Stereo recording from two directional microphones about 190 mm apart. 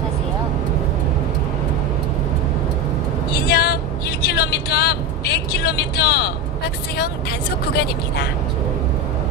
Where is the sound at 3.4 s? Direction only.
60° left (ahead or behind).